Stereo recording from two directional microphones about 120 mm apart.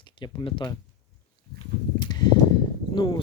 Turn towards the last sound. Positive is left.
turn(degrees=40)  # may be behind; listen again after turning